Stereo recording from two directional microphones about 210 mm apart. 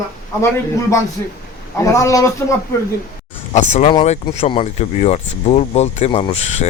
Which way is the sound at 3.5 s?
35° left (ahead or behind).